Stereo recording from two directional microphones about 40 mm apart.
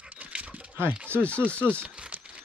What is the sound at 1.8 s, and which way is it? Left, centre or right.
Speech, right.